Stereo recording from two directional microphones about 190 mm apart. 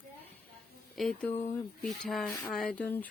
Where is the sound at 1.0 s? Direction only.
Centre (ahead or behind).